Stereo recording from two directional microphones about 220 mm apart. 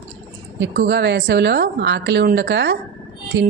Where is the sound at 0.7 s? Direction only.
45° right (ahead or behind).